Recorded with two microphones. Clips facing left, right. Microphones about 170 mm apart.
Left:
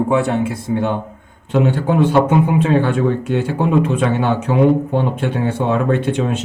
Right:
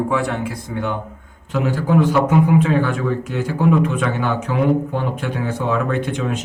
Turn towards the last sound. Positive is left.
turn(degrees=25)  # may be behind; listen again after turning